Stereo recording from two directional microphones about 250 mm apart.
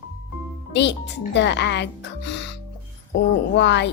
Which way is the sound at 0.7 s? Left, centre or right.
Left.